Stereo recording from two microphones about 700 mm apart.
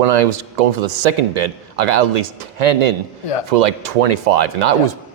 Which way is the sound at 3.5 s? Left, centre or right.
Right.